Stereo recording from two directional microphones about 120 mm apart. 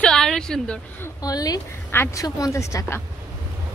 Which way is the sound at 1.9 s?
20° left (ahead or behind).